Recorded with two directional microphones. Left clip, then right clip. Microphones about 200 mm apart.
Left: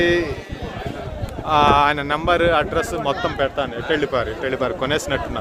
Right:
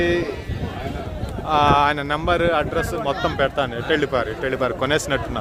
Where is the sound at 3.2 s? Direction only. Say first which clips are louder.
Right 1 dB; 25° right (ahead or behind).